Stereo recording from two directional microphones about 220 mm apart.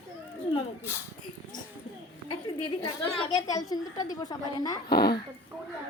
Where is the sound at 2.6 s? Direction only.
25° left (ahead or behind).